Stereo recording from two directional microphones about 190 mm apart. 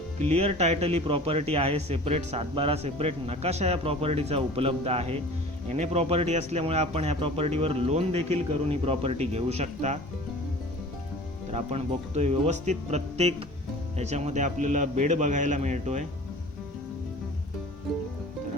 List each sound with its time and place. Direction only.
0.2 s a man's voice: 35° right (ahead or behind)
11.5 s a man's voice: 35° right (ahead or behind)